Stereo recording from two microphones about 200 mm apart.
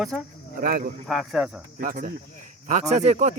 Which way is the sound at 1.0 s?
Centre (ahead or behind).